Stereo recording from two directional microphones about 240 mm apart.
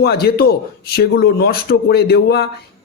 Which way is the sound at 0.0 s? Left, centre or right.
Left.